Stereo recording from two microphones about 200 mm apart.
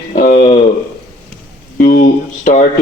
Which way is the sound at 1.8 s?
40° left (ahead or behind).